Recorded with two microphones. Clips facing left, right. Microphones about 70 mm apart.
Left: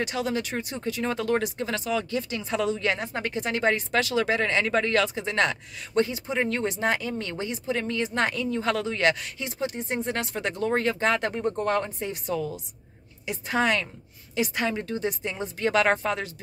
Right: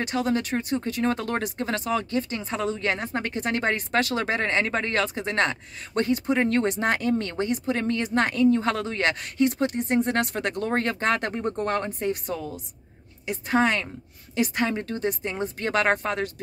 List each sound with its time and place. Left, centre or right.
0.0 s a woman's voice: right